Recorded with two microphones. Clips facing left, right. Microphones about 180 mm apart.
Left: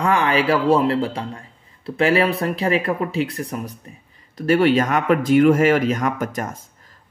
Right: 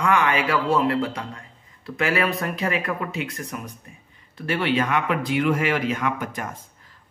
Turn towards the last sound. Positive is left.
turn(degrees=45)  # may be behind; listen again after turning